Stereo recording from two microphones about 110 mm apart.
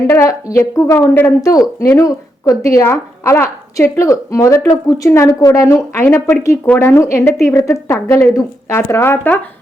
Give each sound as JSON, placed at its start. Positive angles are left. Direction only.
{"t": 0.1, "sound": "speech", "side_deg": 25}
{"t": 1.4, "sound": "speech", "side_deg": 35}